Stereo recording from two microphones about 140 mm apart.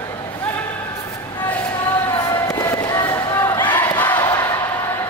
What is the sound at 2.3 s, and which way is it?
Basketball bounce, 25° left (ahead or behind).